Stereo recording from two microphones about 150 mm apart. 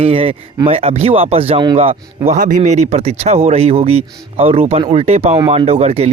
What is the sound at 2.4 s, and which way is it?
Speech, 60° right (ahead or behind).